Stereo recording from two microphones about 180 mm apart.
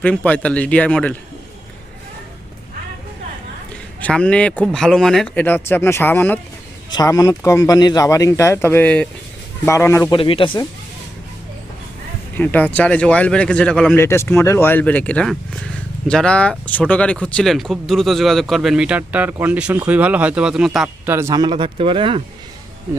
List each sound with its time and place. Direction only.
0.0 s speech: 5° left (ahead or behind)
4.0 s speech: 5° left (ahead or behind)
10.1 s speech: 30° left (ahead or behind)
12.4 s speech: 10° left (ahead or behind)
14.0 s speech: 15° left (ahead or behind); by 22.2 s 30° right (ahead or behind)